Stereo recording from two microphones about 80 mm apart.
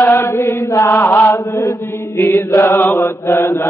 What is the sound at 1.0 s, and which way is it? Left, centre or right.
Mantra, left.